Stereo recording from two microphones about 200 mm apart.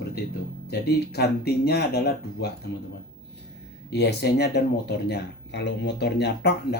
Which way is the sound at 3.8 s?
55° left (ahead or behind).